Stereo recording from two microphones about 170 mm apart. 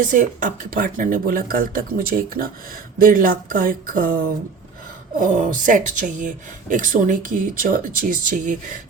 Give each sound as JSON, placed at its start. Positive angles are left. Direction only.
{"t": 0.0, "sound": "speech", "side_deg": -50}